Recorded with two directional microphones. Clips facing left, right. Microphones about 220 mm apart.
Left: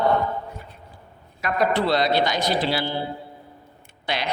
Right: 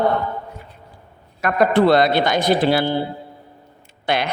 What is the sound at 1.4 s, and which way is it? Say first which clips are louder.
A man's voice: right 6 dB; 55° right (ahead or behind).